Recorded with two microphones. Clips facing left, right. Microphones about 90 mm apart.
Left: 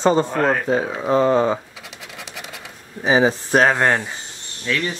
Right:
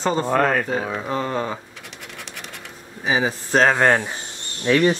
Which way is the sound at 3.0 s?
25° left (ahead or behind).